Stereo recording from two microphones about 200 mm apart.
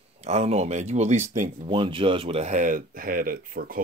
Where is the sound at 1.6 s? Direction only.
25° right (ahead or behind).